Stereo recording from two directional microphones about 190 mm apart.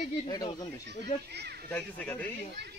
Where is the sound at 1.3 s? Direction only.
60° right (ahead or behind).